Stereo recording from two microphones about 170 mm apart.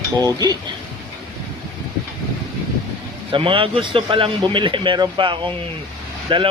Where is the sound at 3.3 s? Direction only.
30° right (ahead or behind).